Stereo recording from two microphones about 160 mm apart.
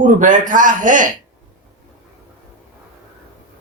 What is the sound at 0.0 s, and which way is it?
Speech, 55° right (ahead or behind).